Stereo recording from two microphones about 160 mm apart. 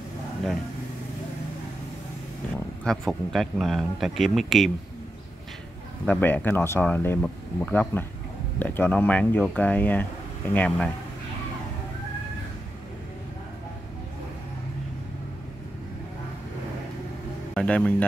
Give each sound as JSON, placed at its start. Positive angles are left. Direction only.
{"t": 2.5, "sound": "speech", "side_deg": 5}
{"t": 6.0, "sound": "speech", "side_deg": 10}
{"t": 17.6, "sound": "speech", "side_deg": 10}